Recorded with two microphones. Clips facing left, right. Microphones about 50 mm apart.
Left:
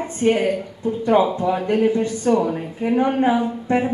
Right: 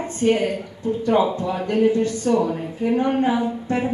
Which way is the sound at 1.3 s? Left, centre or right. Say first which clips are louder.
Left 2 dB; centre.